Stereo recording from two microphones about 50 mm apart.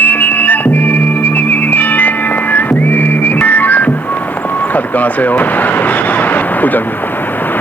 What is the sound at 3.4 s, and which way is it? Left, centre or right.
Music, left.